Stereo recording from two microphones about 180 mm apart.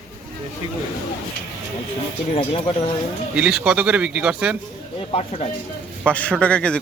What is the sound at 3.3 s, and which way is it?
Speech, 5° right (ahead or behind).